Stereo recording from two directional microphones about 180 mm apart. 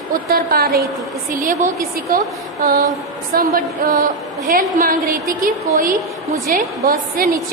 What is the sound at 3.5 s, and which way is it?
A woman's voice, 50° right (ahead or behind).